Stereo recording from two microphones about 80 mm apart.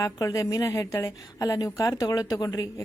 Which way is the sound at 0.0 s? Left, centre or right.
Left.